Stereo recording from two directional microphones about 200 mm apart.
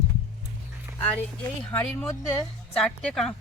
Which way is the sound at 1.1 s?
10° left (ahead or behind).